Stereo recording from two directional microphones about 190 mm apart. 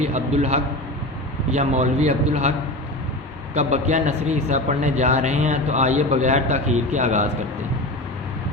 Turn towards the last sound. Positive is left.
turn(degrees=-40)  # may be behind; listen again after turning